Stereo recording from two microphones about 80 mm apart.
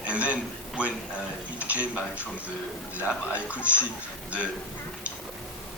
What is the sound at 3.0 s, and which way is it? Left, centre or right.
Speech, centre.